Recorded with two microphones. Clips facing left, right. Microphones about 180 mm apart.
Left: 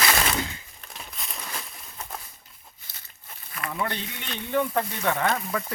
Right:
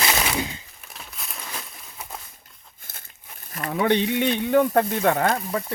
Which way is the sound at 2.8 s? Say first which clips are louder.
Right 3 dB; 50° right (ahead or behind).